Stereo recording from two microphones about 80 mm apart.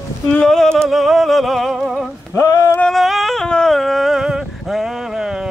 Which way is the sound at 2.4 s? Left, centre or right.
Left.